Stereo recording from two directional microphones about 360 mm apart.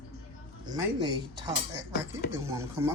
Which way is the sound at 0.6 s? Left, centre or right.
Centre.